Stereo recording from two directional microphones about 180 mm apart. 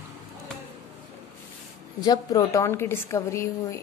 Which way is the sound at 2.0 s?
20° left (ahead or behind).